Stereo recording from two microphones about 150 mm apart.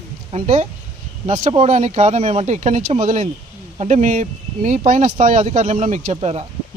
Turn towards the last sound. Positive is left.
turn(degrees=-40)  # may be behind; listen again after turning